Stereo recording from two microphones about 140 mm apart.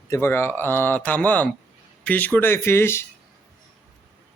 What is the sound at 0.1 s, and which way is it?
Speech, 15° left (ahead or behind).